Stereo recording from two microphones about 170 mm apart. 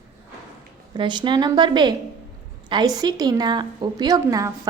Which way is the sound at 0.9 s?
25° right (ahead or behind).